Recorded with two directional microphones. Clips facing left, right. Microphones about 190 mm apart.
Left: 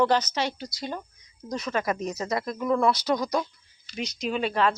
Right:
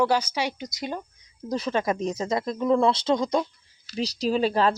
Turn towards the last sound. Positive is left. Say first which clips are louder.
# right 3 dB
turn(degrees=-35)  # may be behind; listen again after turning